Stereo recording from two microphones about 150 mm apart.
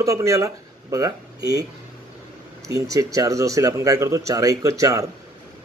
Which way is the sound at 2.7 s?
20° right (ahead or behind).